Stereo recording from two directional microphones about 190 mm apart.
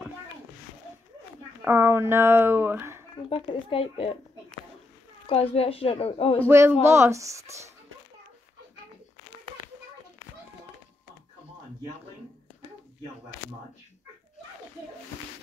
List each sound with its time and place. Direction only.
1.6 s speech: 10° right (ahead or behind)
3.3 s speech: 30° left (ahead or behind)
5.2 s a woman's voice: 30° left (ahead or behind)
6.5 s speech: 15° right (ahead or behind)